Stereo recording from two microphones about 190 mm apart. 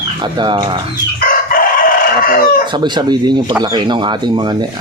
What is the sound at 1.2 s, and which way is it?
Crowing, 50° left (ahead or behind).